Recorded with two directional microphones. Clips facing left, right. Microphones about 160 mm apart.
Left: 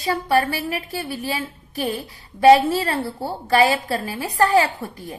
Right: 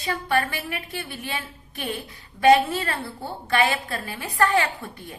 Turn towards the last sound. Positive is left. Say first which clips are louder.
# left 4 dB
turn(degrees=35)  # may be behind; listen again after turning